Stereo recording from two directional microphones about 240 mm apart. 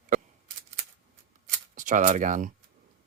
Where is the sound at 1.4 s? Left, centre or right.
Right.